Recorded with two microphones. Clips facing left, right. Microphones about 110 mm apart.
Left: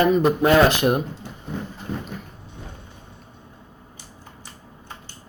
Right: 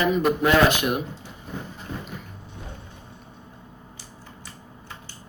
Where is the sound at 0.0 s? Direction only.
40° left (ahead or behind).